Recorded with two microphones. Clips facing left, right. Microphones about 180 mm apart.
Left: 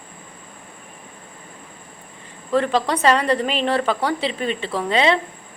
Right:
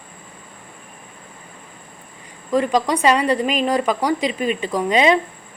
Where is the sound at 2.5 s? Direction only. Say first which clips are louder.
Right 1 dB; 10° right (ahead or behind).